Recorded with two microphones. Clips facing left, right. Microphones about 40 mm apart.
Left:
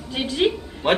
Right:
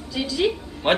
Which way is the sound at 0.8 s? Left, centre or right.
Right.